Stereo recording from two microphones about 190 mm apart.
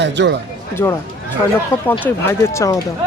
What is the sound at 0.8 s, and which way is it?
Speech, 15° left (ahead or behind).